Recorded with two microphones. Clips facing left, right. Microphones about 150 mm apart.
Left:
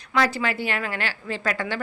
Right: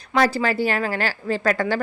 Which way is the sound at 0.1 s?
35° right (ahead or behind).